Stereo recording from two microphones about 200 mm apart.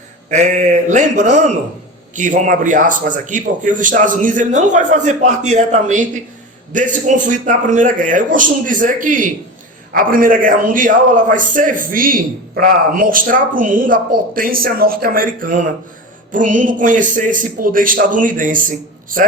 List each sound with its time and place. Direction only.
0.3 s a man's voice: 35° right (ahead or behind)